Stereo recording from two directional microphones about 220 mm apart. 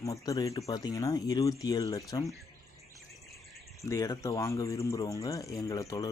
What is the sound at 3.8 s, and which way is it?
Speech, 15° left (ahead or behind).